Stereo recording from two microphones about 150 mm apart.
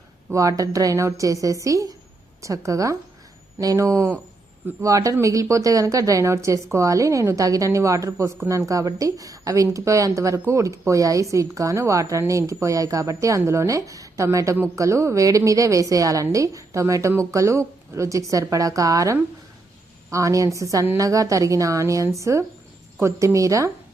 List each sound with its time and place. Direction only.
0.3 s speech: 20° right (ahead or behind)